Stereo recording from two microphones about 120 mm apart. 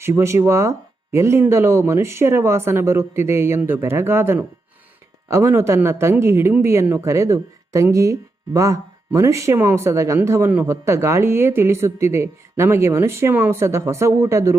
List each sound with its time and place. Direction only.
0.0 s speech: 25° right (ahead or behind)